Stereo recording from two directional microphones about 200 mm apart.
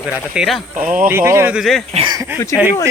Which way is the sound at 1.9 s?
25° right (ahead or behind).